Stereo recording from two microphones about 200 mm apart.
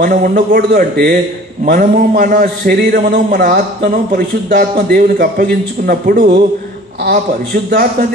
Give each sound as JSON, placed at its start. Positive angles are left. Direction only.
{"t": 0.0, "sound": "a man's voice", "side_deg": -45}